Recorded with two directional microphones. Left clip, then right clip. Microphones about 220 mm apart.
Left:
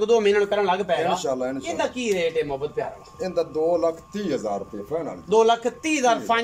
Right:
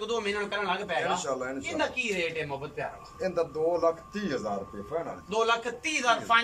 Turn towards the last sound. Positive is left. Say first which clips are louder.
# left 4 dB
turn(degrees=35)  # may be behind; listen again after turning